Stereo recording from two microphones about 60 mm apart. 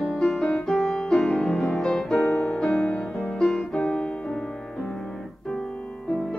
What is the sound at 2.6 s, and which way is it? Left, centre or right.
Music, centre.